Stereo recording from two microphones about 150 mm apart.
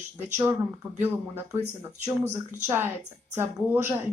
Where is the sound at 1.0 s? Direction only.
15° right (ahead or behind).